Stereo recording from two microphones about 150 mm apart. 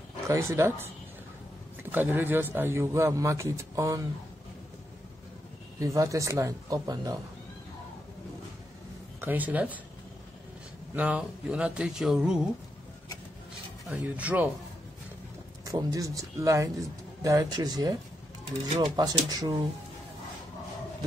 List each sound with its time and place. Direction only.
0.3 s a man's voice: 20° right (ahead or behind)
5.8 s speech: 20° right (ahead or behind)
9.2 s a man's voice: 10° right (ahead or behind)
11.0 s a man's voice: 10° right (ahead or behind)
13.8 s a man's voice: 5° right (ahead or behind)
15.6 s speech: 25° right (ahead or behind)